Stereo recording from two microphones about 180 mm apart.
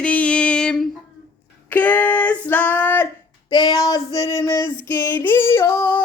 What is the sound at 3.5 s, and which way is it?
Female singing, 20° left (ahead or behind).